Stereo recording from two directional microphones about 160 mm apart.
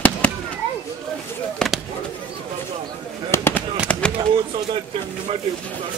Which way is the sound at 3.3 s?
15° left (ahead or behind).